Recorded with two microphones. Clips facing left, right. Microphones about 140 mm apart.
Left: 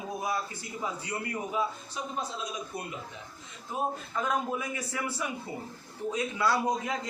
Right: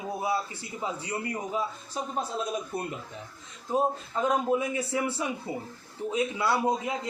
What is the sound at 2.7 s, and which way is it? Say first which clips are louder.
Speech: right 5 dB; 55° right (ahead or behind).